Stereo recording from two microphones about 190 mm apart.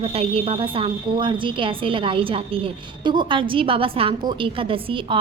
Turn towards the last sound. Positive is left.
turn(degrees=-25)  # may be behind; listen again after turning